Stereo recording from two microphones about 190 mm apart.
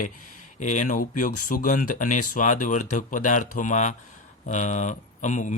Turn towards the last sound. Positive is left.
turn(degrees=40)  # may be behind; listen again after turning